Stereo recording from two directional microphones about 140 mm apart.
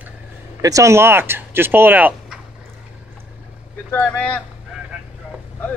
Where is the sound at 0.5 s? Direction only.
25° right (ahead or behind).